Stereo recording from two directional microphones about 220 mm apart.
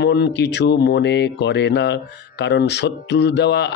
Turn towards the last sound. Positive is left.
turn(degrees=50)  # may be behind; listen again after turning